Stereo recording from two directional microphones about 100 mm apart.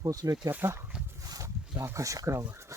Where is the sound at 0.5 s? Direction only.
20° right (ahead or behind).